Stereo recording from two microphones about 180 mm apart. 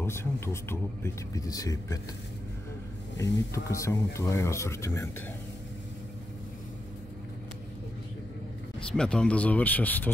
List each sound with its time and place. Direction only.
0.0 s speech: 15° left (ahead or behind)
3.2 s speech: 15° left (ahead or behind)
8.9 s speech: 5° left (ahead or behind)